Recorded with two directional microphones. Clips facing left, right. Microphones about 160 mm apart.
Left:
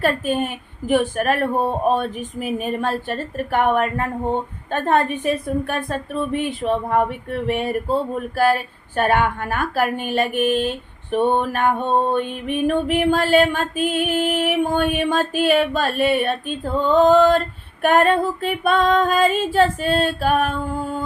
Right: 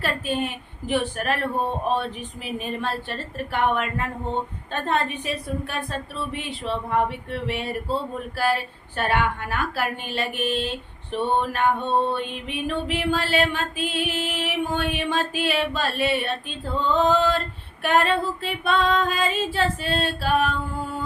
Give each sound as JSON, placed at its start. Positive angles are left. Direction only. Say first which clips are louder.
{"t": 0.0, "sound": "music", "louder": "left 6 dB", "side_deg": 45}
{"t": 9.0, "sound": "music", "louder": "left 5 dB", "side_deg": 50}